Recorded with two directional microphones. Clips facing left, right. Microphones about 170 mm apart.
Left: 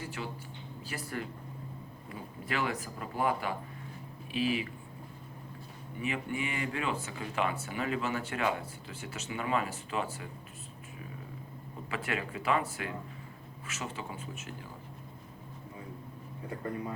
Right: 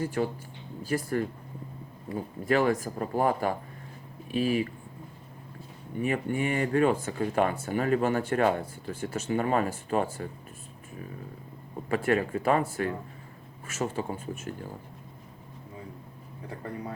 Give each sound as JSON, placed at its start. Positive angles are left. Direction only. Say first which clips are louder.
{"t": 0.0, "sound": "speech", "louder": "right 11 dB", "side_deg": -45}
{"t": 6.0, "sound": "speech", "louder": "right 7 dB", "side_deg": -45}
{"t": 11.9, "sound": "speech", "louder": "right 10 dB", "side_deg": -45}